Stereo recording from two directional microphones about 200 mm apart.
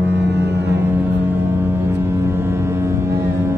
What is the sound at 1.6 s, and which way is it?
Foghorn, 10° right (ahead or behind).